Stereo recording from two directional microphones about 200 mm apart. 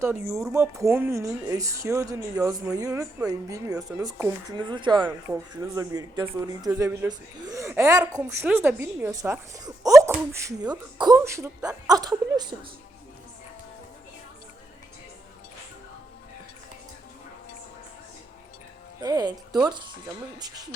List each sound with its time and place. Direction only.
0.5 s speech: 15° right (ahead or behind)
19.0 s speech: 20° right (ahead or behind)